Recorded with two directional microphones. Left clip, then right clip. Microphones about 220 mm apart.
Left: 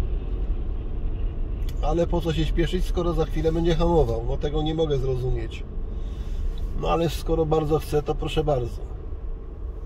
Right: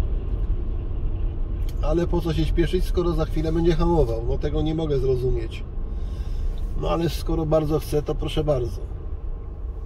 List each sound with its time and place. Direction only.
1.8 s speech: 25° left (ahead or behind)
6.8 s speech: 25° left (ahead or behind)